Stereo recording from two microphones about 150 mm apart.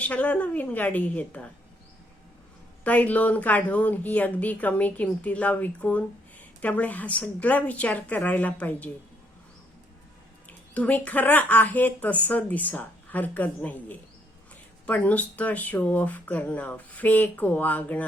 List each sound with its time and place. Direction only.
0.0 s speech: 10° left (ahead or behind)
2.8 s speech: 10° left (ahead or behind)
10.8 s speech: 10° left (ahead or behind)